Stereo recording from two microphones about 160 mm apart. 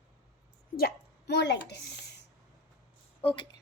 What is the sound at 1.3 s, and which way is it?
Speech, 90° left.